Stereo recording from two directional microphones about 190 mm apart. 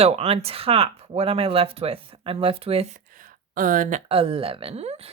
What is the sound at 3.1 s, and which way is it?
Speech, 45° right (ahead or behind).